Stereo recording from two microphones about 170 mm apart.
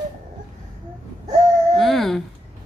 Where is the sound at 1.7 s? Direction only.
Centre (ahead or behind).